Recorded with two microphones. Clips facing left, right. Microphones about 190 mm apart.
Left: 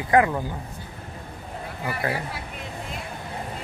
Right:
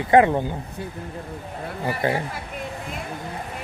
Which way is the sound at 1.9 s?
30° right (ahead or behind).